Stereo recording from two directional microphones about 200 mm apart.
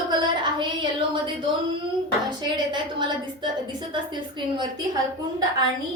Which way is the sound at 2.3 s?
20° right (ahead or behind).